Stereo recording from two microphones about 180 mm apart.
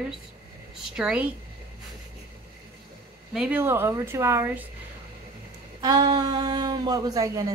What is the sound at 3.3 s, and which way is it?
A woman's voice, 10° right (ahead or behind).